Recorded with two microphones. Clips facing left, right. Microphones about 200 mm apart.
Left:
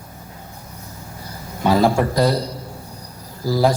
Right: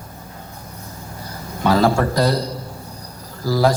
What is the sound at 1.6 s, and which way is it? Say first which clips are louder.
A man's voice: even; 20° left (ahead or behind).